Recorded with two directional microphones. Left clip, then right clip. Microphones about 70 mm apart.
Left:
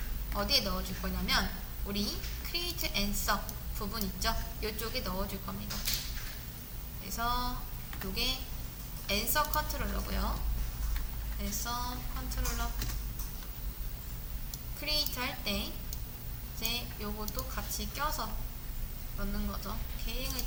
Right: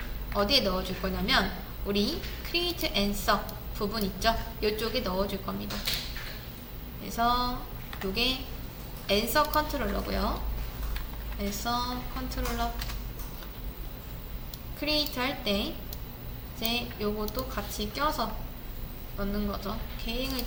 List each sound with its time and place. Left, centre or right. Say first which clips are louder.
0.3 s a woman's voice: right 6 dB; left
7.2 s a woman's voice: right 7 dB; left
11.3 s a woman's voice: right 7 dB; left
14.8 s a woman's voice: right 5 dB; left